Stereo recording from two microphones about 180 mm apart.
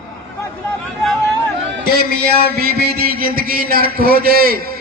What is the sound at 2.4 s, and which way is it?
A man's voice, 60° right (ahead or behind).